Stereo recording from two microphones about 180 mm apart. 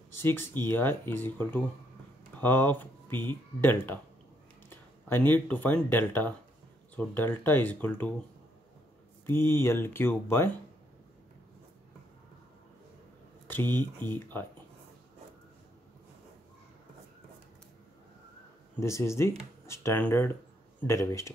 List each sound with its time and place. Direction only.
0.1 s speech: 10° left (ahead or behind)
9.2 s speech: 15° left (ahead or behind)
13.5 s speech: 10° left (ahead or behind)
18.8 s speech: 15° left (ahead or behind)